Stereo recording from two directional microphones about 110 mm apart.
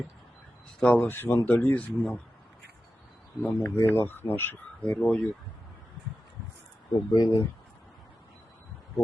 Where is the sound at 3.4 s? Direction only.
20° left (ahead or behind).